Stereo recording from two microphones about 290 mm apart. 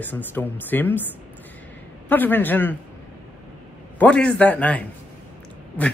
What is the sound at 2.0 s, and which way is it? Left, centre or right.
Speech, centre.